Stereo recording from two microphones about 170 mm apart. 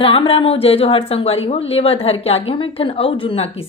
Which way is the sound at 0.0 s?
30° left (ahead or behind).